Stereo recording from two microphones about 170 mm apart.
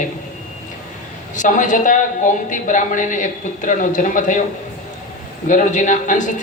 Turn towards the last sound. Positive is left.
turn(degrees=45)  # may be behind; listen again after turning